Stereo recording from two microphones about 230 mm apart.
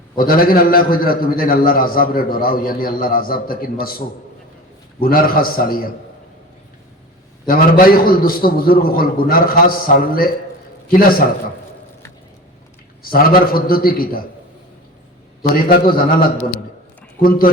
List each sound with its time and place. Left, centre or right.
0.2 s a man's voice: left
7.4 s a man's voice: left
13.0 s a man's voice: left
15.4 s a man's voice: left